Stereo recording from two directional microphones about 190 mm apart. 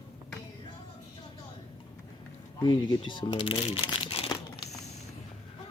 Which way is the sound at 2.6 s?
25° left (ahead or behind).